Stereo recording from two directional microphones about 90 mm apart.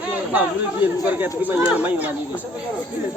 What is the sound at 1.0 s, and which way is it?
Speech, 20° right (ahead or behind).